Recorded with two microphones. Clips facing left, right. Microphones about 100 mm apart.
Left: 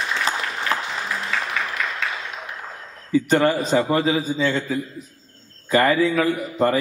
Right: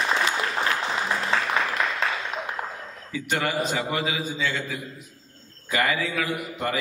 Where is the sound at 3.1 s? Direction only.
35° left (ahead or behind).